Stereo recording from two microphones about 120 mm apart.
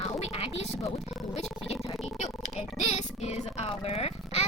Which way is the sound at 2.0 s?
70° left (ahead or behind).